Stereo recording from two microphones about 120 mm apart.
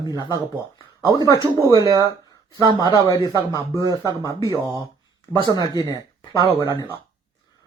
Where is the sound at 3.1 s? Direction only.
35° left (ahead or behind).